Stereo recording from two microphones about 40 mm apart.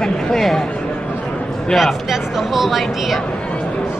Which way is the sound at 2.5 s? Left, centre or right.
Centre.